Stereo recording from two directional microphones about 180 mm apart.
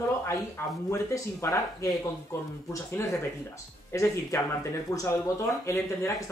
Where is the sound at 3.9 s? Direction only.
15° left (ahead or behind).